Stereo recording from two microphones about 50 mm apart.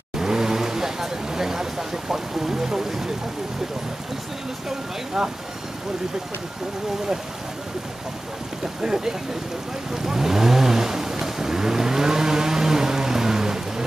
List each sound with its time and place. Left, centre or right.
0.2 s vehicle: centre
4.6 s speech: centre
8.8 s speech: centre
10.0 s vehicle: centre